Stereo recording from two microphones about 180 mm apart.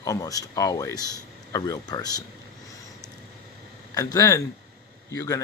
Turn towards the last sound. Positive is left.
turn(degrees=15)  # may be behind; listen again after turning